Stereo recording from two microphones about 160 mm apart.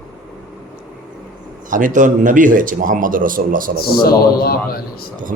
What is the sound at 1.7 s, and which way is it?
Speech, 55° right (ahead or behind).